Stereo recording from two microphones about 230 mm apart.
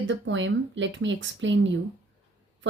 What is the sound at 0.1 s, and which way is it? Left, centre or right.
Speech, right.